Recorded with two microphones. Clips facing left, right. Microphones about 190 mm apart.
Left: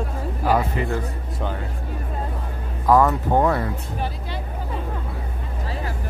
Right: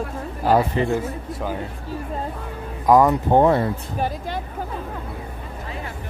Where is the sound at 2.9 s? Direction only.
15° right (ahead or behind).